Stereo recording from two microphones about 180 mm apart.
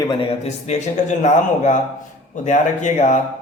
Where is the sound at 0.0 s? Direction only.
25° left (ahead or behind).